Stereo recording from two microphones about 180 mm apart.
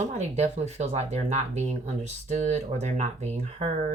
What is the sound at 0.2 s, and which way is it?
Speech, 40° right (ahead or behind).